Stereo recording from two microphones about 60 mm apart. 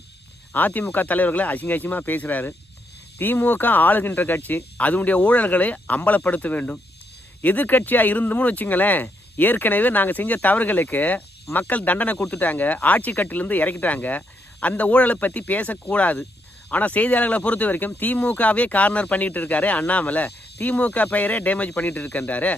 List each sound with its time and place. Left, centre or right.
0.5 s speech: left